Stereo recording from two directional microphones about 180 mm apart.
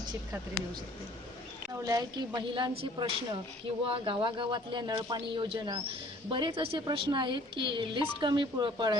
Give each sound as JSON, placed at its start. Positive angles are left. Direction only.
{"t": 1.8, "sound": "a woman's voice", "side_deg": -20}